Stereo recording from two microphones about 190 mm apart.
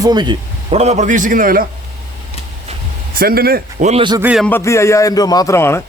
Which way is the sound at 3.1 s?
50° right (ahead or behind).